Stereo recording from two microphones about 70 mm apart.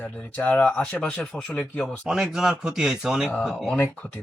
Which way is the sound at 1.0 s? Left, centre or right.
Centre.